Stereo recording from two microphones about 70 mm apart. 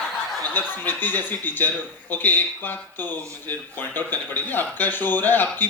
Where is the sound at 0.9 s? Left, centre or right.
Left.